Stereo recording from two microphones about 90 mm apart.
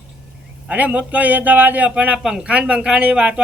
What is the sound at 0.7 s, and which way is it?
A man's voice, 20° right (ahead or behind).